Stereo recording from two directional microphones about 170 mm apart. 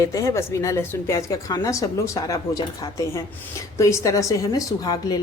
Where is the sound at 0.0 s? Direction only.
20° left (ahead or behind).